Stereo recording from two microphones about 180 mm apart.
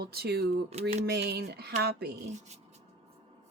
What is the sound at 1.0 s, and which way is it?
Speech, 60° right (ahead or behind).